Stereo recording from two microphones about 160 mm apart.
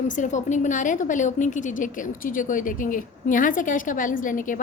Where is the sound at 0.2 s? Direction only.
50° left (ahead or behind).